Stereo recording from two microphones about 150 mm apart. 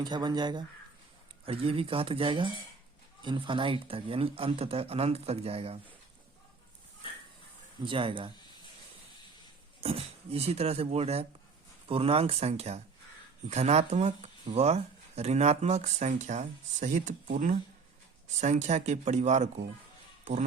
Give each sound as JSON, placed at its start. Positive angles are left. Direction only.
{"t": 0.0, "sound": "speech", "side_deg": -30}
{"t": 7.9, "sound": "speech", "side_deg": -35}
{"t": 9.8, "sound": "speech", "side_deg": -40}